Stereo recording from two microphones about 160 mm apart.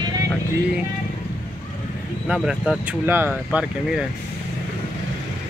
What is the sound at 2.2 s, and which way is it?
Speech, 5° right (ahead or behind).